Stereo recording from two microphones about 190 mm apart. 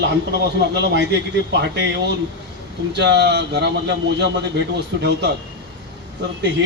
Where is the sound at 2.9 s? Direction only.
60° right (ahead or behind).